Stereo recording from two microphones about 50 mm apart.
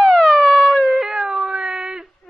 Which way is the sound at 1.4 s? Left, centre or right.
Right.